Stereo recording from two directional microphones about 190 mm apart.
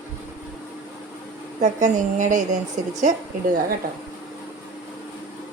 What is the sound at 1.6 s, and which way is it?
Speech, 40° right (ahead or behind).